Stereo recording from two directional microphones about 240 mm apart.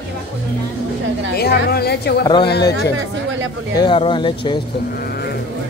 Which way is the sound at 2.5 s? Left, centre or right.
Left.